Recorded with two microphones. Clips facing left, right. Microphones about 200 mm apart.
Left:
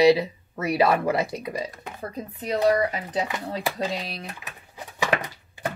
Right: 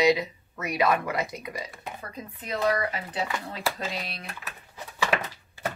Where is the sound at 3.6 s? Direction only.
20° left (ahead or behind).